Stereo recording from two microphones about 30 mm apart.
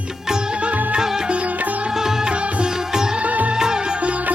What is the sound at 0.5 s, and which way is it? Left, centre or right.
Music, right.